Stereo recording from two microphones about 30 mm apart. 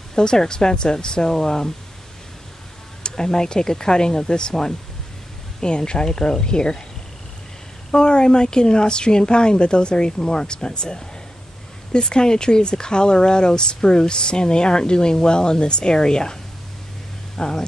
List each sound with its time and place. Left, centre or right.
0.1 s speech: left
3.0 s speech: left
7.9 s speech: left
17.4 s speech: left